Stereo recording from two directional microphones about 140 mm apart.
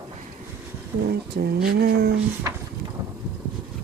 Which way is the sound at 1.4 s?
90° right.